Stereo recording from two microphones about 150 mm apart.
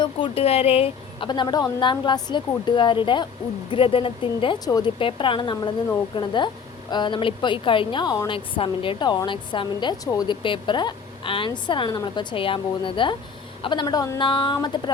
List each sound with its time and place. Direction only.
0.0 s a woman's voice: 40° left (ahead or behind)